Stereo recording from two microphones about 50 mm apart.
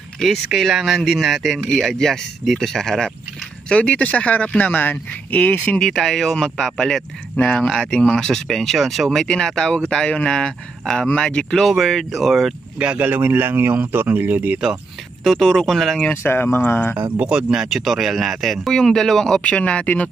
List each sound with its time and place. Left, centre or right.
0.5 s speech: centre
1.8 s speech: centre
3.6 s speech: left
5.9 s speech: centre
7.3 s speech: left
7.7 s speech: centre
9.2 s speech: centre
11.6 s speech: centre
12.7 s speech: right
13.1 s speech: right
15.2 s speech: centre
16.2 s speech: left
17.3 s speech: centre
18.7 s speech: centre